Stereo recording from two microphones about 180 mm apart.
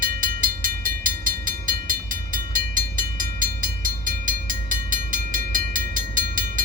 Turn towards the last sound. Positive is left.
turn(degrees=-50)  # may be behind; listen again after turning